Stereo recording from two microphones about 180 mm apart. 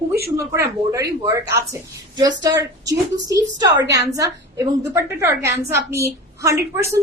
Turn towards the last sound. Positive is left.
turn(degrees=-15)  # may be behind; listen again after turning